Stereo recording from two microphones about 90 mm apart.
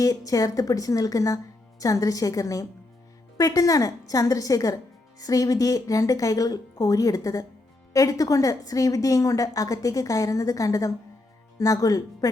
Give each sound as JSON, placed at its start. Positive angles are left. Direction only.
{"t": 0.0, "sound": "a woman's voice", "side_deg": 40}